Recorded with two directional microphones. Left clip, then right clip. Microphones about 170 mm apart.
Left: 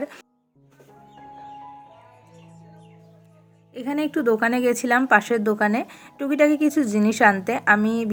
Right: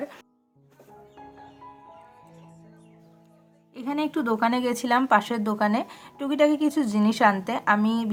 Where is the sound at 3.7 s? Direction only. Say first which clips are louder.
Left 3 dB; 15° left (ahead or behind).